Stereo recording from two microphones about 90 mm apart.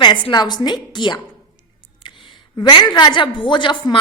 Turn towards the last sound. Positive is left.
turn(degrees=60)  # may be behind; listen again after turning